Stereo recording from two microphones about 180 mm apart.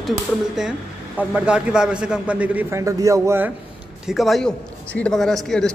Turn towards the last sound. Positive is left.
turn(degrees=0)  # may be behind; listen again after turning